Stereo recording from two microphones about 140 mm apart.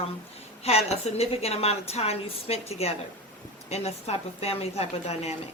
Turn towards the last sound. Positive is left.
turn(degrees=50)  # may be behind; listen again after turning